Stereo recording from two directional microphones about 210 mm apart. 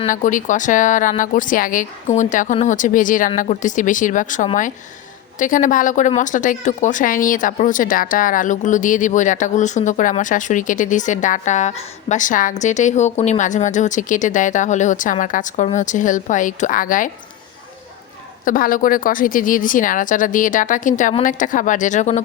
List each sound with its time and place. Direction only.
0.1 s a woman's voice: 40° left (ahead or behind)
18.4 s a woman's voice: 40° left (ahead or behind)